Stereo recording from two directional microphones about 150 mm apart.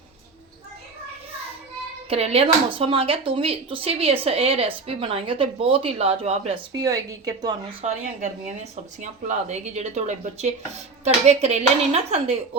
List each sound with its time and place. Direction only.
2.0 s speech: 40° right (ahead or behind)
6.7 s speech: 25° right (ahead or behind)
8.7 s a woman's voice: 50° right (ahead or behind)